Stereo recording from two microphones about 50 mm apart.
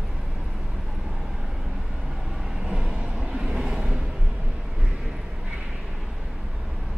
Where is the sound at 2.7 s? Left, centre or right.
Centre.